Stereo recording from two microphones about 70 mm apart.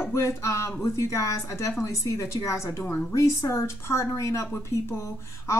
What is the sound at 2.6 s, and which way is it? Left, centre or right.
Speech, left.